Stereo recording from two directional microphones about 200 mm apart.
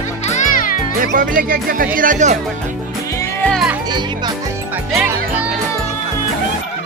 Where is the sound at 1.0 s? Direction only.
45° right (ahead or behind).